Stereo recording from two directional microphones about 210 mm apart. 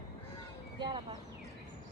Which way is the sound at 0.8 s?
20° right (ahead or behind).